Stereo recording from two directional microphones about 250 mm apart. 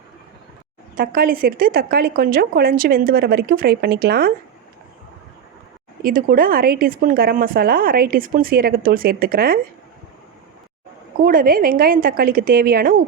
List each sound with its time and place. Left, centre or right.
0.9 s a woman's voice: right
6.0 s a woman's voice: right
11.3 s a woman's voice: right